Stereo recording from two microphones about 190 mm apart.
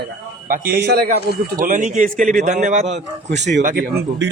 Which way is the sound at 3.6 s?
50° right (ahead or behind).